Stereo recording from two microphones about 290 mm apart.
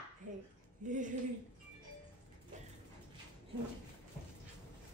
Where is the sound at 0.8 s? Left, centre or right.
Right.